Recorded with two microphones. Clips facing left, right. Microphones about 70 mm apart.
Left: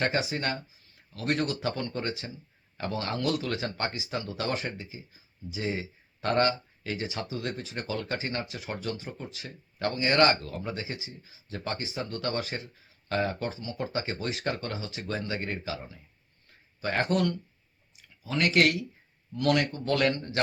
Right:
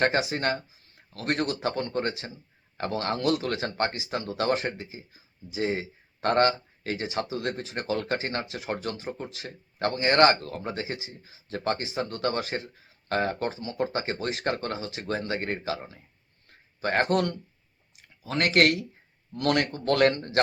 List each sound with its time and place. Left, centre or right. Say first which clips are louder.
0.0 s speech: right 4 dB; right
16.5 s a sound: right 3 dB; right
18.2 s speech: right 2 dB; right